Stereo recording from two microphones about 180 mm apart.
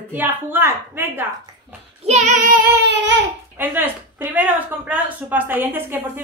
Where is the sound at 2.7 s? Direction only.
70° right (ahead or behind).